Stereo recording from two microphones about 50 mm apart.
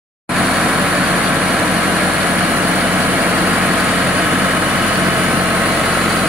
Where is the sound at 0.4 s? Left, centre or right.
Centre.